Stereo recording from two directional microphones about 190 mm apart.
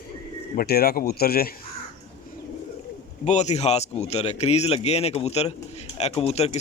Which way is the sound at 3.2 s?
35° left (ahead or behind).